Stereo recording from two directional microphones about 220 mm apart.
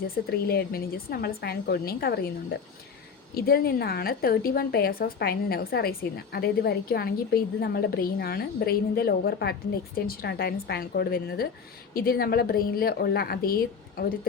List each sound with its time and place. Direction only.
0.3 s a woman's voice: 45° left (ahead or behind)